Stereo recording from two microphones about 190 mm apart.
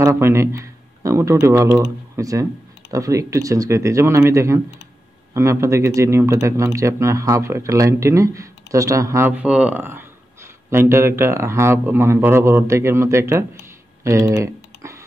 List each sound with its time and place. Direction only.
0.0 s speech: 15° right (ahead or behind)